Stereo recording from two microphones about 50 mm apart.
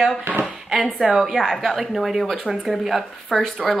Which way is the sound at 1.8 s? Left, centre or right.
Centre.